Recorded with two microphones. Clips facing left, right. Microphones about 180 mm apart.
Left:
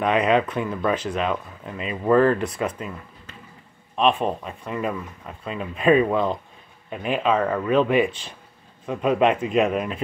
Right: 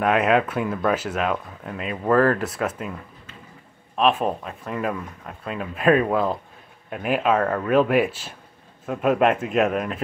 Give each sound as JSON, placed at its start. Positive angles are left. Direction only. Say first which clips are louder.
{"t": 0.0, "sound": "speech", "louder": "even", "side_deg": -5}
{"t": 3.9, "sound": "speech", "louder": "even", "side_deg": 0}